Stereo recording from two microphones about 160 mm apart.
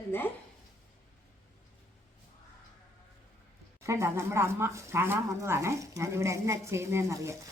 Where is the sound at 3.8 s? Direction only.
15° right (ahead or behind).